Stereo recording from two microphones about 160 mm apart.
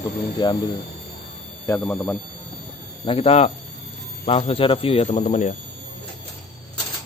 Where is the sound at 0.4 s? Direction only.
30° left (ahead or behind).